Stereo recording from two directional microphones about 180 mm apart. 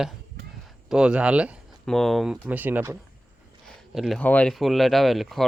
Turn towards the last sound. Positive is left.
turn(degrees=0)  # may be behind; listen again after turning